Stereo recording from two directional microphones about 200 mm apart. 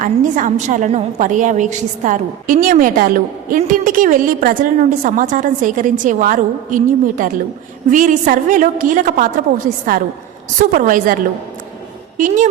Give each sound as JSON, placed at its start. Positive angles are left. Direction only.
{"t": 0.0, "sound": "a woman's voice", "side_deg": -40}
{"t": 10.6, "sound": "a woman's voice", "side_deg": -40}